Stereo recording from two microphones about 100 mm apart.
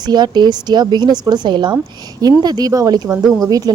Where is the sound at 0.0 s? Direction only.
45° right (ahead or behind).